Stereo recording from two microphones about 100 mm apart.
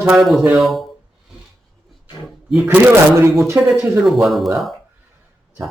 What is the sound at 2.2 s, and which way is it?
Speech, centre (ahead or behind).